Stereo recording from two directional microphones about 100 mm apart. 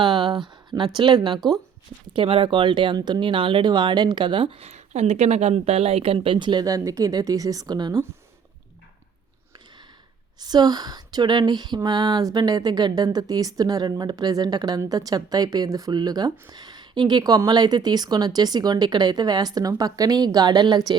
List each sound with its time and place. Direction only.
0.0 s speech: 50° right (ahead or behind)
2.1 s speech: 65° right (ahead or behind); by 7.9 s 45° right (ahead or behind)
10.4 s speech: 45° right (ahead or behind)